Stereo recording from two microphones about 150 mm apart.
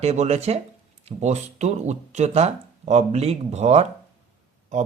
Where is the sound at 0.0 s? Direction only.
45° right (ahead or behind).